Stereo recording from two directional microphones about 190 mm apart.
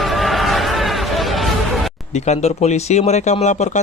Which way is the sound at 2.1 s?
35° left (ahead or behind).